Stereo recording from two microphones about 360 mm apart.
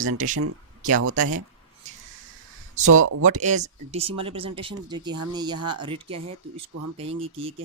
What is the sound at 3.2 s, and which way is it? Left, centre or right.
Speech, centre.